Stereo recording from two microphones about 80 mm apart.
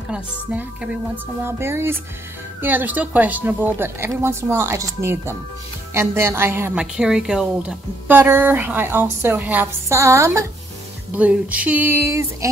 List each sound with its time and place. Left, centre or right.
0.1 s a woman's voice: centre
1.1 s music: right
2.6 s speech: right
5.0 s music: right
6.7 s a woman's voice: centre
8.1 s speech: right
9.8 s music: right
11.1 s speech: centre
12.1 s music: right